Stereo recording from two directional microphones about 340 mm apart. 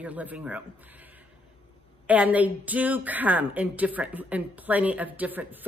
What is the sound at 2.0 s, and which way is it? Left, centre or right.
A woman's voice, centre.